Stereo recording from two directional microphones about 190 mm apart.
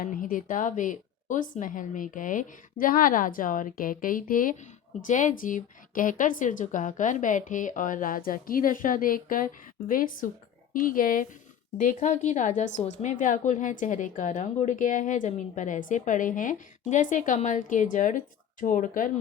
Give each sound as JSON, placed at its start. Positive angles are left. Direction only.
{"t": 0.0, "sound": "a woman's voice", "side_deg": 45}